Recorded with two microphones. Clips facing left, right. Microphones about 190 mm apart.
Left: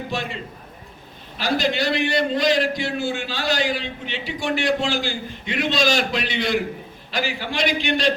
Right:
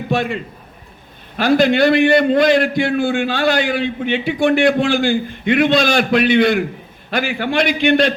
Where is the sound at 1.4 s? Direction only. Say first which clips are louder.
Right 9 dB; 55° right (ahead or behind).